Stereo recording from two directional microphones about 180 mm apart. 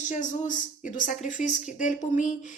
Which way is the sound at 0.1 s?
45° left (ahead or behind).